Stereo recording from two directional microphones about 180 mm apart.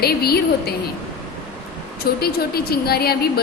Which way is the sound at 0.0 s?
60° left (ahead or behind).